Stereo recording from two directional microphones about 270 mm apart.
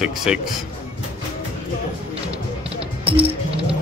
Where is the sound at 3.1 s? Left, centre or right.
Right.